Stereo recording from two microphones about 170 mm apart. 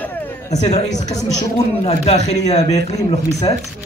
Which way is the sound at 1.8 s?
40° left (ahead or behind).